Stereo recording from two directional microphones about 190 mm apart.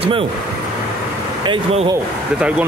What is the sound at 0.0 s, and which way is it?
Speech, 30° right (ahead or behind).